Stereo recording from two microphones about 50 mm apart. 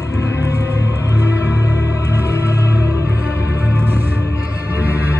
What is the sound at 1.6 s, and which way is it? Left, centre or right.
Music, left.